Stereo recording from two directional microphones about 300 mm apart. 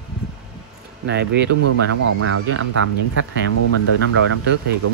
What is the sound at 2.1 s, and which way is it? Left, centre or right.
Speech, right.